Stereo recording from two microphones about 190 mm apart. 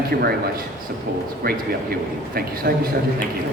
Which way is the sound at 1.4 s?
50° right (ahead or behind).